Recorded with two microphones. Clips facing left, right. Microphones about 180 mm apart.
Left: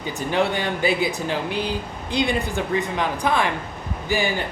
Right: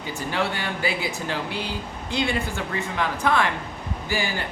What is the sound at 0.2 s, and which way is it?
Speech, 20° left (ahead or behind).